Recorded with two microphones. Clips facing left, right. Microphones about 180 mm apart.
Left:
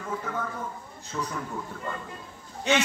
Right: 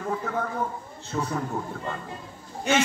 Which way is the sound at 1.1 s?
45° right (ahead or behind).